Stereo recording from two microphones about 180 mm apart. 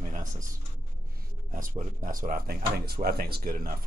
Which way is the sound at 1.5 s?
50° right (ahead or behind).